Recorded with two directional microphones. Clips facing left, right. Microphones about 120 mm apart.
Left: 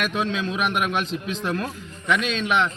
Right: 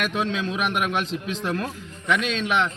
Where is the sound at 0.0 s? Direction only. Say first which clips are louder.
Even; 30° right (ahead or behind).